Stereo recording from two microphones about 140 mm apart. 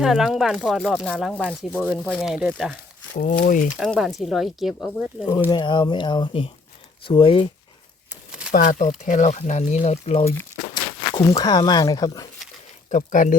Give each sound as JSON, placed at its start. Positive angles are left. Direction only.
{"t": 0.0, "sound": "speech", "side_deg": -5}
{"t": 3.2, "sound": "speech", "side_deg": 65}
{"t": 3.7, "sound": "speech", "side_deg": 0}
{"t": 5.5, "sound": "speech", "side_deg": 30}
{"t": 8.5, "sound": "speech", "side_deg": 80}
{"t": 11.1, "sound": "speech", "side_deg": 25}
{"t": 12.9, "sound": "speech", "side_deg": 65}